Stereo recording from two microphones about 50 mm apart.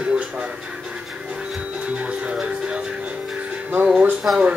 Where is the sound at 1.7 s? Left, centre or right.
Right.